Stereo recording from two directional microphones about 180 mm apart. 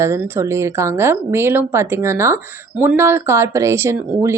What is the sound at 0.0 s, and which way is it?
Speech, 15° right (ahead or behind).